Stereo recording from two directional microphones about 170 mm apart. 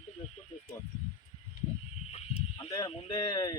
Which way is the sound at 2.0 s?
40° left (ahead or behind).